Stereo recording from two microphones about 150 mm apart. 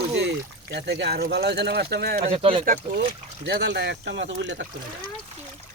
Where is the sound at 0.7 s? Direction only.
90° right.